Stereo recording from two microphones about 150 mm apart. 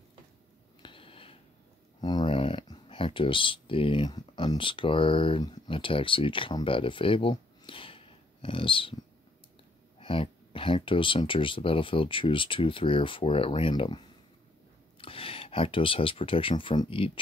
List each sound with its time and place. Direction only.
0.8 s a sound: 35° left (ahead or behind)
2.0 s speech: 30° left (ahead or behind)
9.9 s speech: 35° left (ahead or behind)